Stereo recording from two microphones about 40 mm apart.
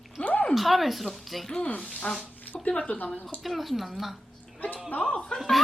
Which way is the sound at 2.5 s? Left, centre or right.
Left.